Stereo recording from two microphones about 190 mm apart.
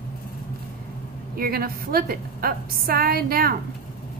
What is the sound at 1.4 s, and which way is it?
A woman's voice, 50° right (ahead or behind).